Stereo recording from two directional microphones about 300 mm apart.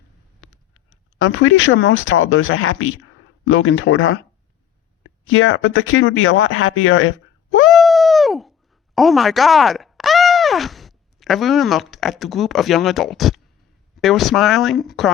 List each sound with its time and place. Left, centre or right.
1.2 s speech: left
5.2 s speech: left
7.7 s a sound: centre
9.0 s speech: centre